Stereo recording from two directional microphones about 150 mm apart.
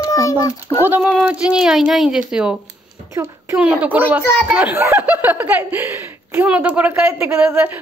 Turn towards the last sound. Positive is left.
turn(degrees=-15)  # may be behind; listen again after turning